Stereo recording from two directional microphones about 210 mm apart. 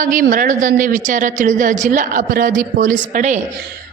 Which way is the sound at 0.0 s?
40° right (ahead or behind).